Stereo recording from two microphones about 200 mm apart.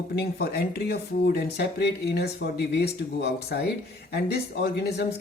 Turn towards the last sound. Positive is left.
turn(degrees=55)  # may be behind; listen again after turning